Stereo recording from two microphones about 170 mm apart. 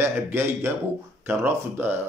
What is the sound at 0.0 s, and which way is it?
Speech, 15° right (ahead or behind).